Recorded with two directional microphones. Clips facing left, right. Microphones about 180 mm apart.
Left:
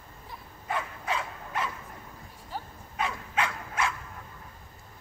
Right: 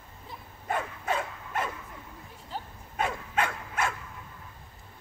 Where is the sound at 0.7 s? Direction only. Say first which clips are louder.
Right 2 dB; 50° right (ahead or behind).